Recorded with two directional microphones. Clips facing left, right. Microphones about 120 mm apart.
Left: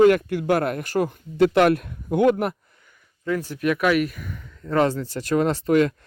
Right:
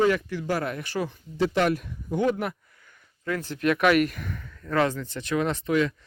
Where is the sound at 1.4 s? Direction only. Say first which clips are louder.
Left 7 dB; 65° left (ahead or behind).